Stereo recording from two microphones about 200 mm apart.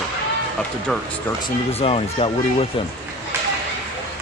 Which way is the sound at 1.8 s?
30° left (ahead or behind).